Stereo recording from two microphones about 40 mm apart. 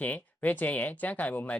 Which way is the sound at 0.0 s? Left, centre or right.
Left.